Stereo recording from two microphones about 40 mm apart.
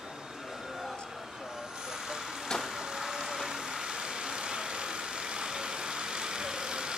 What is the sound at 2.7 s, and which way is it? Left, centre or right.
Vehicle, centre.